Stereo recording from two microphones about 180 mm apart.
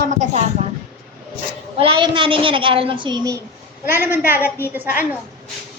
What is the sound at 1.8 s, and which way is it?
A woman's voice, 30° right (ahead or behind).